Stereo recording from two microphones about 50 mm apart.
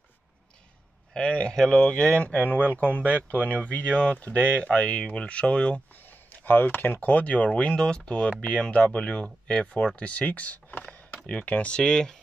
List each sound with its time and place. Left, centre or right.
1.1 s speech: left
2.4 s speech: right
2.7 s speech: left
6.4 s speech: left
11.7 s speech: centre